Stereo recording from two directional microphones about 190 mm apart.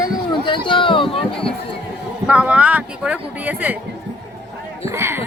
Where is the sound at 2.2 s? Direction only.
5° right (ahead or behind).